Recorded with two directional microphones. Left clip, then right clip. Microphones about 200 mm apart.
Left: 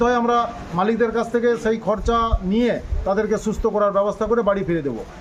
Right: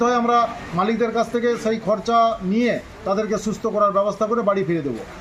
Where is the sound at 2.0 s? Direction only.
25° left (ahead or behind).